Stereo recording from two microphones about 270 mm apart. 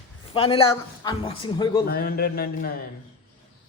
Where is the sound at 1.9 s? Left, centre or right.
Left.